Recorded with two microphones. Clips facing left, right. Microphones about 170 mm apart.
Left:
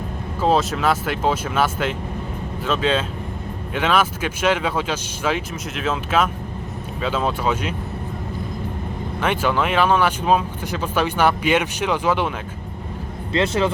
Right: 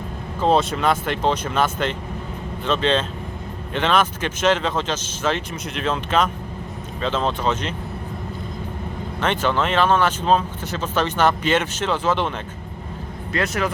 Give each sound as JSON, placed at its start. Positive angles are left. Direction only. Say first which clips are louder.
{"t": 0.4, "sound": "speech", "louder": "even", "side_deg": 0}
{"t": 9.2, "sound": "speech", "louder": "even", "side_deg": 10}
{"t": 13.3, "sound": "speech", "louder": "left 4 dB", "side_deg": 25}